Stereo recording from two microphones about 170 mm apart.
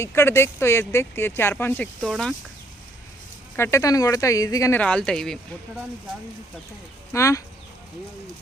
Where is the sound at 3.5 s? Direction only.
15° left (ahead or behind).